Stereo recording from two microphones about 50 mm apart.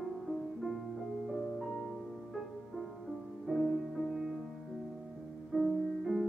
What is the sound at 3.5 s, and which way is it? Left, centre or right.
Music, centre.